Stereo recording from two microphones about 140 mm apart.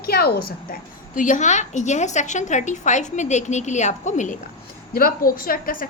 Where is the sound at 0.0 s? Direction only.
90° left; by 4.4 s 60° left (ahead or behind).